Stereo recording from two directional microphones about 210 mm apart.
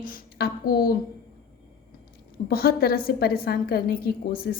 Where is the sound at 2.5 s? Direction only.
45° left (ahead or behind).